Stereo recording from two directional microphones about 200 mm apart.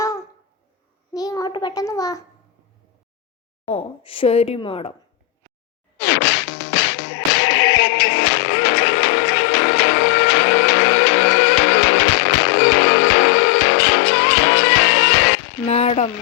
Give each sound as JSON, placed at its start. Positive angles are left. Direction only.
{"t": 0.0, "sound": "a sound", "side_deg": 15}
{"t": 1.1, "sound": "a child's voice", "side_deg": 20}
{"t": 3.7, "sound": "a woman's voice", "side_deg": 25}
{"t": 6.0, "sound": "whip", "side_deg": 65}
{"t": 15.6, "sound": "speech", "side_deg": 30}